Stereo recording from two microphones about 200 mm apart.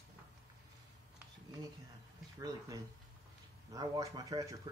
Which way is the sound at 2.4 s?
15° right (ahead or behind).